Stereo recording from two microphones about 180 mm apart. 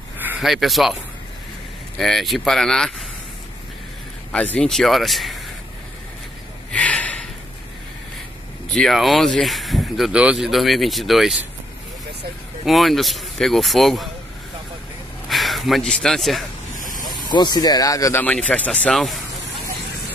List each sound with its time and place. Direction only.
0.2 s speech: 5° right (ahead or behind)
2.0 s speech: centre (ahead or behind)
4.3 s speech: 5° left (ahead or behind)
6.7 s snort: 5° left (ahead or behind)
8.7 s speech: centre (ahead or behind)
12.6 s speech: centre (ahead or behind)
15.2 s speech: centre (ahead or behind)
17.1 s speech: 25° left (ahead or behind)
18.2 s speech: 10° left (ahead or behind)